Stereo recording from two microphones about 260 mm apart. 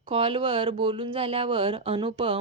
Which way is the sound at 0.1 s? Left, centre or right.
Right.